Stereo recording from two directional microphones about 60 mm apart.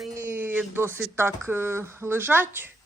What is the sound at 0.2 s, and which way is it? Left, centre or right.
Speech, right.